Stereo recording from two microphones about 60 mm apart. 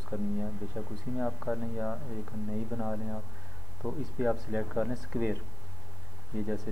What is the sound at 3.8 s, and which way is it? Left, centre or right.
Speech, right.